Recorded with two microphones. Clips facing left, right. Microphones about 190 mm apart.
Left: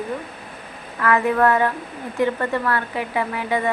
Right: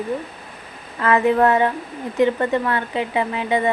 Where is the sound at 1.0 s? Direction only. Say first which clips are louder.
Right 2 dB; 25° right (ahead or behind).